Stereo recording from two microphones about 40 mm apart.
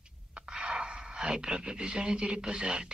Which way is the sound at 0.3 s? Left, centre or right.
Right.